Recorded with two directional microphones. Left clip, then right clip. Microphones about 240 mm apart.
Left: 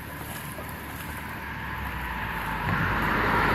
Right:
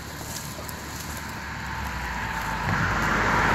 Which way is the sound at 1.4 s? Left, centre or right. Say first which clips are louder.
Right 2 dB; left.